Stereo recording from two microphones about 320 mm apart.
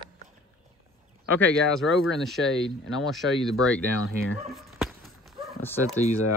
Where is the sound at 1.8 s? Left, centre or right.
Centre.